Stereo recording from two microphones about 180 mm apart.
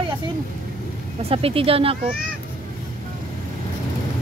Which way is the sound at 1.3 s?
30° right (ahead or behind).